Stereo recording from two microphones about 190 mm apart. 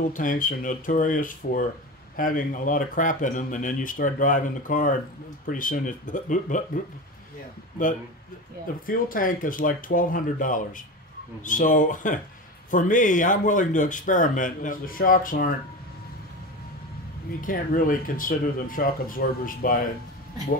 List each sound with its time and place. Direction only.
0.1 s speech: 45° left (ahead or behind)
8.8 s speech: 45° left (ahead or behind)
17.4 s speech: 45° left (ahead or behind)